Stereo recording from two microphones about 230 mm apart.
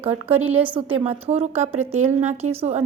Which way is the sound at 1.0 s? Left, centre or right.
Right.